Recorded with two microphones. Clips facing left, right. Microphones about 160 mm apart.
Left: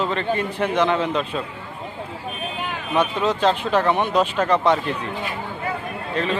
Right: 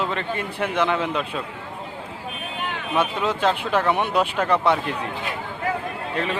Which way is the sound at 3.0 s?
10° right (ahead or behind).